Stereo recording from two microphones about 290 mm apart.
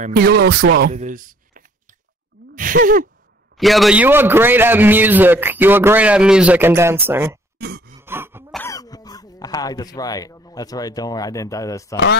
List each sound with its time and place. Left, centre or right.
0.0 s speech: right
2.5 s a sound: right
3.5 s a man's voice: centre
7.5 s grunt: right
8.0 s throat clearing: centre
8.5 s speech: centre